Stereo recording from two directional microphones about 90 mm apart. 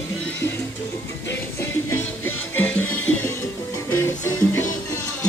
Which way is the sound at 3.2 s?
30° left (ahead or behind).